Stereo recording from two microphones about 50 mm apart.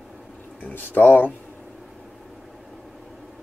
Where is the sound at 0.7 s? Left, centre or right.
Left.